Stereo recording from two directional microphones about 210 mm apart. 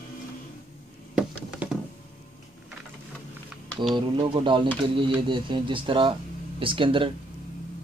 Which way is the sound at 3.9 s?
20° right (ahead or behind).